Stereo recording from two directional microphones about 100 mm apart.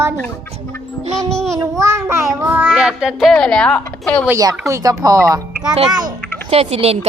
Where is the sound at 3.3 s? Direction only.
5° left (ahead or behind).